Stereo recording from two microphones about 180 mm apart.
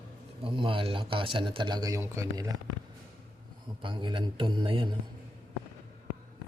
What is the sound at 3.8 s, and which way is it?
A man's voice, 25° right (ahead or behind).